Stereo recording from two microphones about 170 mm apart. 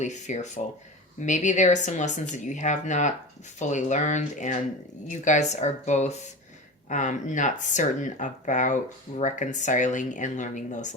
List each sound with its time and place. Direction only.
0.0 s speech: 45° left (ahead or behind)